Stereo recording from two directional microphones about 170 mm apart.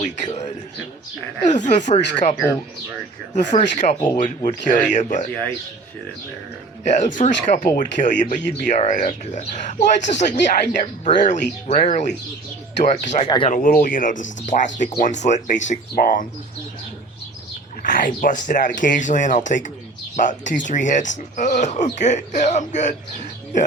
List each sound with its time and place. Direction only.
0.0 s a sound: 45° left (ahead or behind)
1.5 s speech: 45° left (ahead or behind)
3.5 s speech: 45° left (ahead or behind)
6.9 s speech: 50° left (ahead or behind)
13.2 s speech: 25° left (ahead or behind)
13.5 s speech: 55° left (ahead or behind)
17.8 s speech: 50° left (ahead or behind)